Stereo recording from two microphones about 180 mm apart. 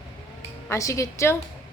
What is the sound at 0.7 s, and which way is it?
Speech, 15° left (ahead or behind).